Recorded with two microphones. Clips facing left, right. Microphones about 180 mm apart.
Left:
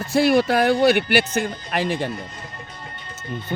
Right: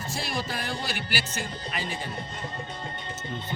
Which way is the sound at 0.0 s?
65° left (ahead or behind).